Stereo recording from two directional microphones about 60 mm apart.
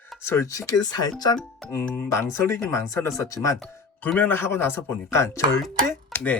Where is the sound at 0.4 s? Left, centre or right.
Left.